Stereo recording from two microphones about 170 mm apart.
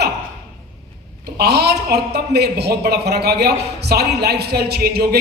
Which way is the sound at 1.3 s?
75° right (ahead or behind).